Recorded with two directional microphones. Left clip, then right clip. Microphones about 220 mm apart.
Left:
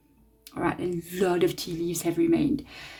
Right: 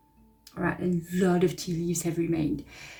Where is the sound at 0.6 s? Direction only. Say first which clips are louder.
Left 2 dB; 45° left (ahead or behind).